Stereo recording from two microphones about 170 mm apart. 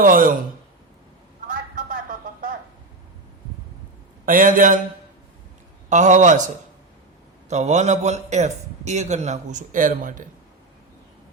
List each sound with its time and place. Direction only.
0.0 s speech: 55° right (ahead or behind)
1.5 s a sound: 55° right (ahead or behind)
4.3 s a man's voice: 50° right (ahead or behind)
5.9 s a man's voice: 45° right (ahead or behind)
7.5 s a man's voice: 40° right (ahead or behind)